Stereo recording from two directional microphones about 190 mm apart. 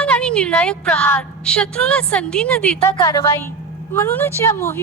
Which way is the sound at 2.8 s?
15° left (ahead or behind).